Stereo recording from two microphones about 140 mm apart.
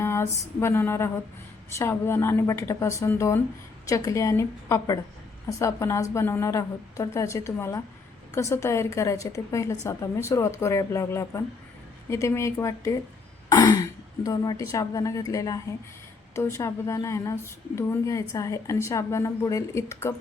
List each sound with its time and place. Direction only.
0.0 s a sound: 20° left (ahead or behind)
1.8 s a woman's voice: 15° left (ahead or behind)
13.5 s throat clearing: 25° left (ahead or behind)
14.3 s a woman's voice: 25° left (ahead or behind)